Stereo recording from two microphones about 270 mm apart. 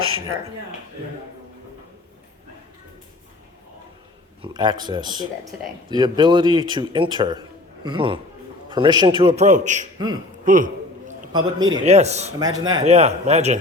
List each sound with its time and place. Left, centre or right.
4.4 s a man's voice: centre
11.1 s a man's voice: centre